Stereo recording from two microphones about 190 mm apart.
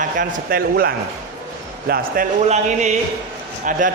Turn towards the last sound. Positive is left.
turn(degrees=-45)  # may be behind; listen again after turning